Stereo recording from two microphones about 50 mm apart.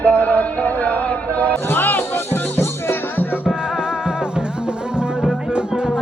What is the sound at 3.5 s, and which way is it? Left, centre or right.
Music, centre.